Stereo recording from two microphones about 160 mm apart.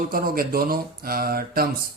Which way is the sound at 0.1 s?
65° right (ahead or behind).